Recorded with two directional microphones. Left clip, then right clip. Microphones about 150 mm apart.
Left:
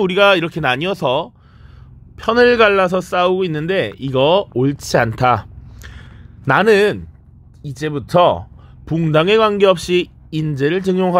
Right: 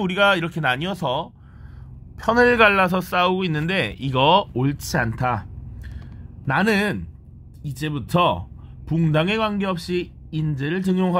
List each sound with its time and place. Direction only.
0.0 s a man's voice: 35° left (ahead or behind)
2.5 s a man's voice: 40° left (ahead or behind)
10.8 s a man's voice: 35° left (ahead or behind)